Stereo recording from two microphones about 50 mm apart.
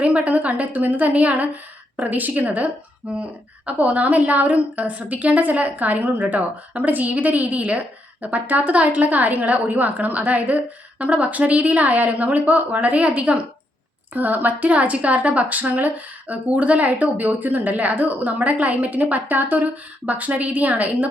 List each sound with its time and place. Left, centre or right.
0.0 s a woman's voice: right